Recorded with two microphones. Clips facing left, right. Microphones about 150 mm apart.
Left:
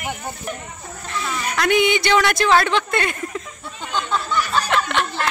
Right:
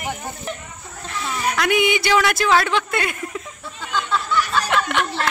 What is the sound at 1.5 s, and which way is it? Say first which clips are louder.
Speech: left 2 dB; 5° right (ahead or behind).